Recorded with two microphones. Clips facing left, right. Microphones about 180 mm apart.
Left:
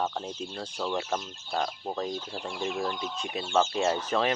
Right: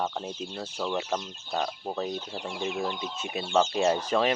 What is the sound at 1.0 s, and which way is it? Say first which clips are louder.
Speech: right 1 dB; 15° right (ahead or behind).